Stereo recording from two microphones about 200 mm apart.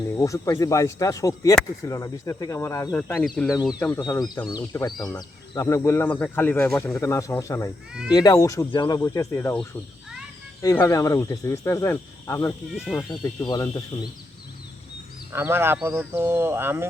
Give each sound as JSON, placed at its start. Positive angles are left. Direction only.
{"t": 0.2, "sound": "speech", "side_deg": 15}
{"t": 3.0, "sound": "speech", "side_deg": 0}
{"t": 3.8, "sound": "speech", "side_deg": 10}
{"t": 12.7, "sound": "speech", "side_deg": -5}
{"t": 13.1, "sound": "speech", "side_deg": 20}
{"t": 15.3, "sound": "speech", "side_deg": -10}